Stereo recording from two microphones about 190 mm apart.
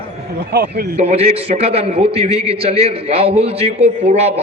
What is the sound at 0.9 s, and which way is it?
A man's voice, 30° right (ahead or behind).